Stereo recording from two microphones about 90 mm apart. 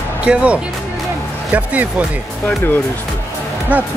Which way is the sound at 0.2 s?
15° right (ahead or behind).